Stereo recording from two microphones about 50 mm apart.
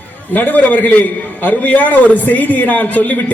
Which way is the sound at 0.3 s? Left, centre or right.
Left.